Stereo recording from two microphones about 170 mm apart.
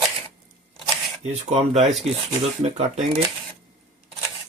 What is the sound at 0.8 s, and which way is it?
Shuffling cards, 40° right (ahead or behind).